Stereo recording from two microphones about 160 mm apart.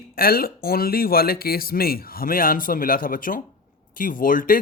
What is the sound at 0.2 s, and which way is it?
Speech, 70° left (ahead or behind).